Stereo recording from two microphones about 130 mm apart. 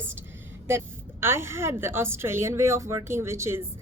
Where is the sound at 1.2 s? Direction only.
20° right (ahead or behind).